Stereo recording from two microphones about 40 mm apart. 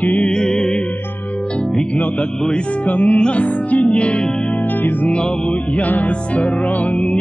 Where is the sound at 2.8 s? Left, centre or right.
Left.